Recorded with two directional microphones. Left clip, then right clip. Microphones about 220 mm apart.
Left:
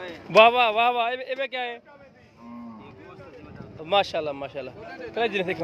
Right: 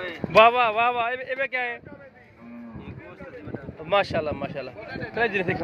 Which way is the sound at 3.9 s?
10° left (ahead or behind).